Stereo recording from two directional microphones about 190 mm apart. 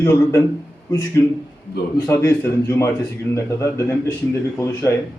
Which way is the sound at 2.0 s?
15° left (ahead or behind).